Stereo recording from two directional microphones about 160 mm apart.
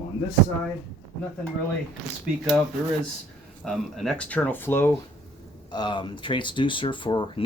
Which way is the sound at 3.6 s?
Centre (ahead or behind).